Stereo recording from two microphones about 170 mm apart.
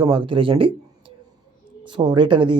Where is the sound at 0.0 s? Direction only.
30° right (ahead or behind).